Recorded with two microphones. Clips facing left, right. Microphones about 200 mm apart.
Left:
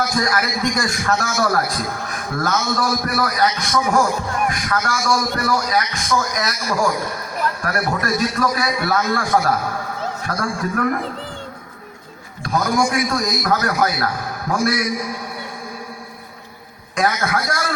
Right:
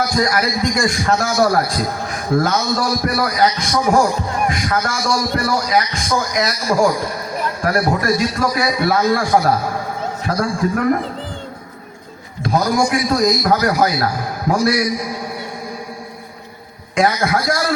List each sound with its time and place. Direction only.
0.2 s speech: 25° right (ahead or behind)
12.4 s a sound: 25° right (ahead or behind)
12.9 s speech: 25° right (ahead or behind)
17.0 s speech: 25° right (ahead or behind)